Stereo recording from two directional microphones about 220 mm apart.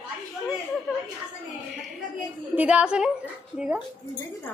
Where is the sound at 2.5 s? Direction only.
5° right (ahead or behind).